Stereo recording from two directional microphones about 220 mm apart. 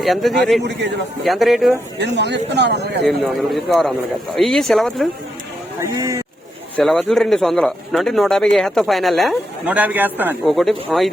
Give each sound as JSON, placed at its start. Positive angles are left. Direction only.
{"t": 0.0, "sound": "speech", "side_deg": 0}
{"t": 0.6, "sound": "speech", "side_deg": -50}
{"t": 1.2, "sound": "speech", "side_deg": 0}
{"t": 2.0, "sound": "speech", "side_deg": -50}
{"t": 3.0, "sound": "speech", "side_deg": 0}
{"t": 5.8, "sound": "speech", "side_deg": -15}
{"t": 6.7, "sound": "speech", "side_deg": 0}